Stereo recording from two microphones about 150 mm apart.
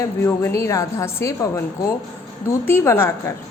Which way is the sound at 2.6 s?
15° left (ahead or behind).